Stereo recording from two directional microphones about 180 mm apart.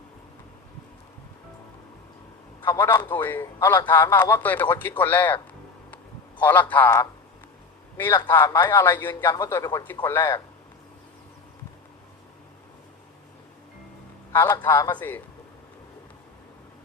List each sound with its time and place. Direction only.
2.6 s speech: 10° left (ahead or behind)
6.4 s speech: 10° left (ahead or behind)
9.2 s speech: 25° left (ahead or behind)
14.3 s speech: 10° left (ahead or behind)